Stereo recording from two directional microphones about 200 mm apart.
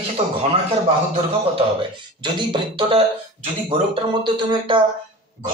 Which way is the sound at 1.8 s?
25° right (ahead or behind).